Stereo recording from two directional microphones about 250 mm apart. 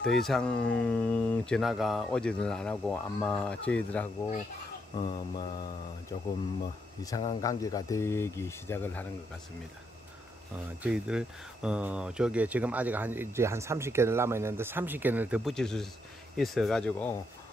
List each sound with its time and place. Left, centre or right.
0.0 s speech: centre
4.9 s mantra: centre
7.0 s speech: centre
10.8 s speech: centre